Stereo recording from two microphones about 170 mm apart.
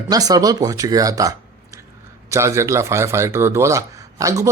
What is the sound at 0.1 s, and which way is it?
A man's voice, 20° right (ahead or behind).